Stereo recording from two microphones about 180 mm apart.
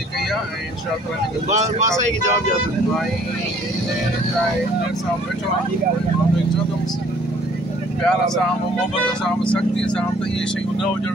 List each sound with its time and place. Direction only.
1.5 s speech: 40° right (ahead or behind)
9.4 s speech: 5° left (ahead or behind)